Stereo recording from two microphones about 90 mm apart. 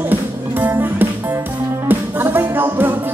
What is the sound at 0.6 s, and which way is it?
Music, 20° right (ahead or behind).